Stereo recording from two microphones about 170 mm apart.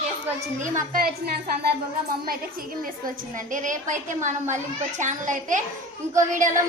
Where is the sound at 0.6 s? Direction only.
55° right (ahead or behind).